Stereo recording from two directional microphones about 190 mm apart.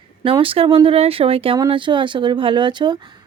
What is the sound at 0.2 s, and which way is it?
Speech, 25° right (ahead or behind).